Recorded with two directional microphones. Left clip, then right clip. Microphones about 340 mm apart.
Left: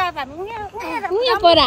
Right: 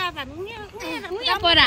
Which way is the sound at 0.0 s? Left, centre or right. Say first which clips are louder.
Left 5 dB; centre.